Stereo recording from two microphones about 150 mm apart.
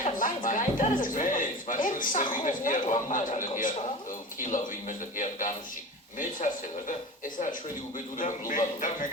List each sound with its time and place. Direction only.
0.0 s a man's voice: 60° left (ahead or behind)
8.2 s a man's voice: 60° left (ahead or behind)